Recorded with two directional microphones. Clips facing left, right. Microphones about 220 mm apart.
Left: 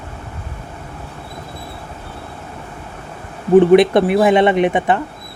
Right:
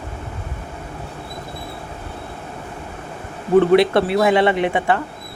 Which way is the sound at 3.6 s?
20° left (ahead or behind).